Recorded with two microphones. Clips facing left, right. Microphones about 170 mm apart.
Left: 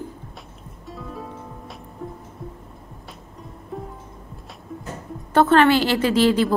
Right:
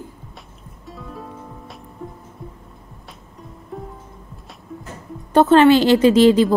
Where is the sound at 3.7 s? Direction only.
Centre (ahead or behind).